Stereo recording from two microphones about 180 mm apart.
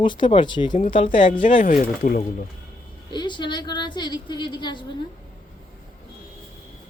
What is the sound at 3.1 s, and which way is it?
A woman's voice, 25° left (ahead or behind).